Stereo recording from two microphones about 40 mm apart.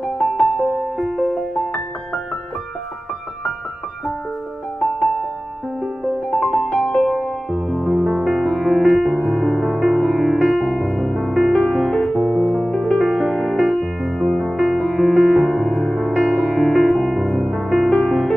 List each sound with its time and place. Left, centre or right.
0.0 s music: centre
6.0 s music: centre
7.5 s music: centre
11.9 s music: centre
12.2 s music: left
12.9 s music: centre